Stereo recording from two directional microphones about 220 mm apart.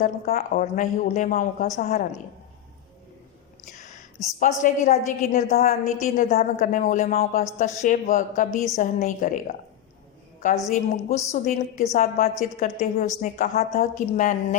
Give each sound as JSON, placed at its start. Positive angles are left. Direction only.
{"t": 0.0, "sound": "a woman's voice", "side_deg": 40}
{"t": 4.4, "sound": "a woman's voice", "side_deg": 35}
{"t": 10.7, "sound": "a woman's voice", "side_deg": 30}